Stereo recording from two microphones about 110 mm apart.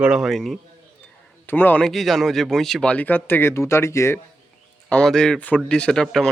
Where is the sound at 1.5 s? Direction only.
15° left (ahead or behind).